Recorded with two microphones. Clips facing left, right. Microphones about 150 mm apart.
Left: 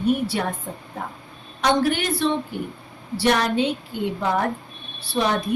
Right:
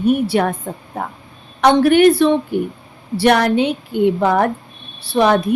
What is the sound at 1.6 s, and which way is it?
A woman's voice, 65° right (ahead or behind).